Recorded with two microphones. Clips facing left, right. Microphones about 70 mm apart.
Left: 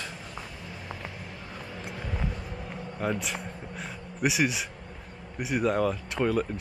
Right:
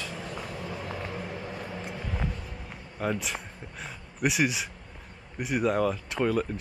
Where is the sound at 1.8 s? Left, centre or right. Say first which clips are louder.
Left 3 dB; centre.